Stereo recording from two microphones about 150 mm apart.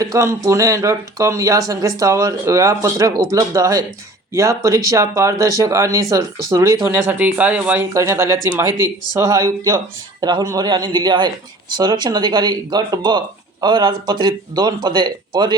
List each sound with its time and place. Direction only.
0.0 s speech: 20° right (ahead or behind)